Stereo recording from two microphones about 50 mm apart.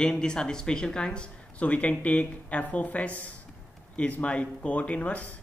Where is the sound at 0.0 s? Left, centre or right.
Centre.